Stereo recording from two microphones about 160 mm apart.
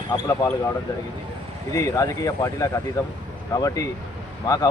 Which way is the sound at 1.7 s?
20° left (ahead or behind).